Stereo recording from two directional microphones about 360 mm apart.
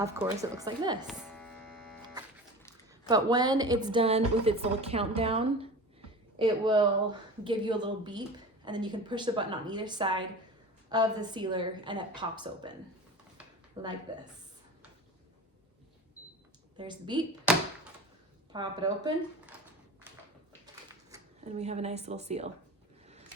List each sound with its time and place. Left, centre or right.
0.0 s speech: centre
1.0 s hum: centre
3.1 s speech: centre
13.8 s speech: centre
16.7 s a sound: centre
18.5 s speech: centre
21.1 s a sound: centre
21.6 s speech: centre